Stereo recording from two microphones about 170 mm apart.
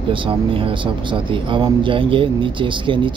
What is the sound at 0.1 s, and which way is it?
Speech, 30° right (ahead or behind).